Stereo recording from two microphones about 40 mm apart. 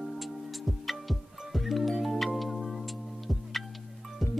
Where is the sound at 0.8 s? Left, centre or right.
Centre.